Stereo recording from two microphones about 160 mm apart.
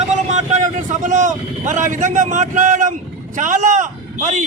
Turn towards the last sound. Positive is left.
turn(degrees=-50)  # may be behind; listen again after turning